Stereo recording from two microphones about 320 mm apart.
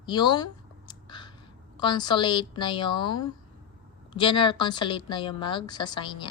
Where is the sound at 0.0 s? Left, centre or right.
Centre.